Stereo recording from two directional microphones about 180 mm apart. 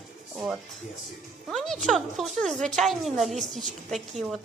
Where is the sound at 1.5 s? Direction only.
Centre (ahead or behind).